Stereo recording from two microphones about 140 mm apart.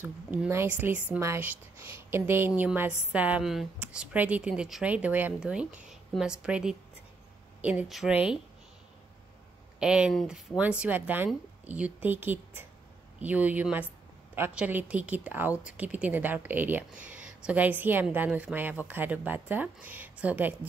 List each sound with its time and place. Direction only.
0.0 s a woman's voice: 15° right (ahead or behind)
9.8 s a woman's voice: 5° right (ahead or behind)